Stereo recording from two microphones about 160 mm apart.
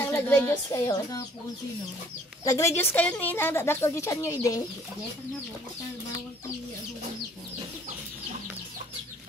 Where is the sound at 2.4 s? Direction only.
20° left (ahead or behind).